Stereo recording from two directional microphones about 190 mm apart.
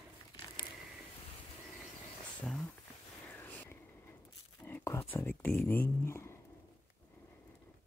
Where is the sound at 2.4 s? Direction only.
Centre (ahead or behind).